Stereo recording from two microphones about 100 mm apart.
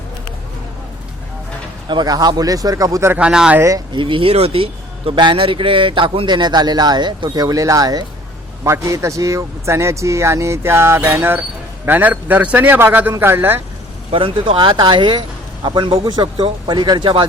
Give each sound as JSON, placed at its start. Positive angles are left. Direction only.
{"t": 1.9, "sound": "speech", "side_deg": -45}
{"t": 3.1, "sound": "speech", "side_deg": -10}
{"t": 3.6, "sound": "speech", "side_deg": -35}
{"t": 3.9, "sound": "speech", "side_deg": -60}
{"t": 8.6, "sound": "a man's voice", "side_deg": -30}
{"t": 14.1, "sound": "speech", "side_deg": -60}